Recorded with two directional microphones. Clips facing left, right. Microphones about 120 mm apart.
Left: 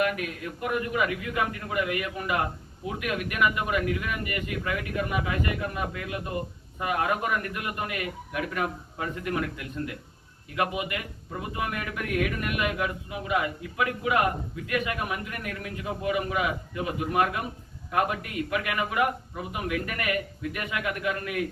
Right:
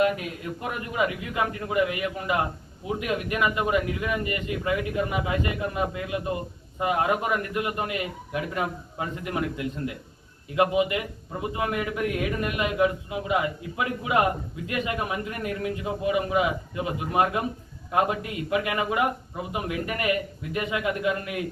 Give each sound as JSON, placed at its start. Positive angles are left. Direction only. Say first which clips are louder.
{"t": 0.0, "sound": "a man's voice", "louder": "right 3 dB", "side_deg": -25}